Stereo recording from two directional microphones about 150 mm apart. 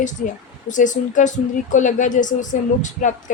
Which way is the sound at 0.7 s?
55° left (ahead or behind).